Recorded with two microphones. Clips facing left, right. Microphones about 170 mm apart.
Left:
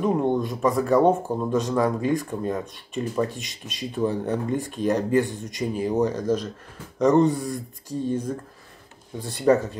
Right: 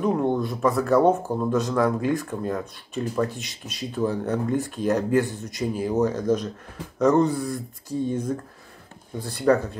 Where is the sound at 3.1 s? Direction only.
Centre (ahead or behind).